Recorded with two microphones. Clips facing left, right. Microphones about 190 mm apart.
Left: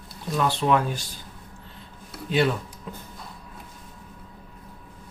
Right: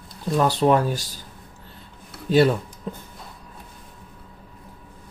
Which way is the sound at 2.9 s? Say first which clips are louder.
Right 7 dB; 35° right (ahead or behind).